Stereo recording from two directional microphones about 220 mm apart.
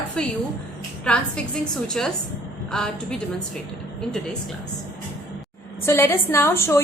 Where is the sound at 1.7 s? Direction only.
5° left (ahead or behind).